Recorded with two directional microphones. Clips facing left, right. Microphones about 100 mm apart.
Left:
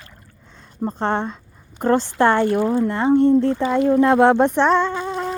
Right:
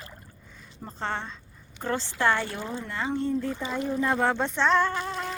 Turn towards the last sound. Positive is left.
turn(degrees=20)  # may be behind; listen again after turning